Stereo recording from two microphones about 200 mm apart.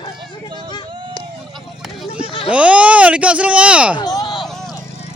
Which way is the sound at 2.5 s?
5° right (ahead or behind).